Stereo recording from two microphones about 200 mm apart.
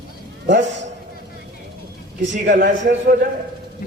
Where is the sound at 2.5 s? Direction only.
45° right (ahead or behind).